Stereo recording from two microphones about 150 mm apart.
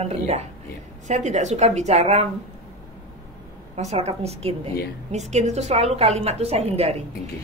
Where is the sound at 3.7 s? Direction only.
45° right (ahead or behind).